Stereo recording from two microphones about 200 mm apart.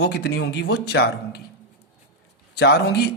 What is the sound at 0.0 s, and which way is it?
A man's voice, 55° left (ahead or behind).